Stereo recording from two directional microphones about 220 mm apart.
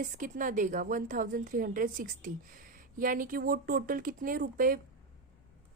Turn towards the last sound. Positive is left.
turn(degrees=-40)  # may be behind; listen again after turning